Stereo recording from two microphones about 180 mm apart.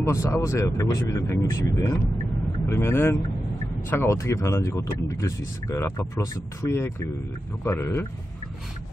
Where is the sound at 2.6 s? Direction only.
15° left (ahead or behind).